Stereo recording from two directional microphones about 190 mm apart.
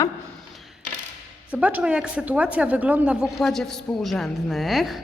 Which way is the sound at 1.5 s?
5° right (ahead or behind).